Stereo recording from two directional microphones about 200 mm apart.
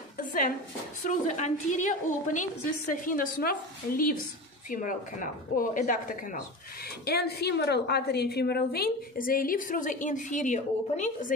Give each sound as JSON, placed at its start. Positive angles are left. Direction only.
{"t": 0.2, "sound": "dishes", "side_deg": 40}
{"t": 1.0, "sound": "a woman's voice", "side_deg": 35}